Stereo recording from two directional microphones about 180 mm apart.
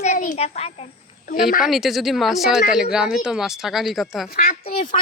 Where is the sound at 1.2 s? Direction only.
50° left (ahead or behind).